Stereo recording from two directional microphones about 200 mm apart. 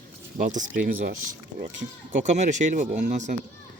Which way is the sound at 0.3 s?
40° right (ahead or behind).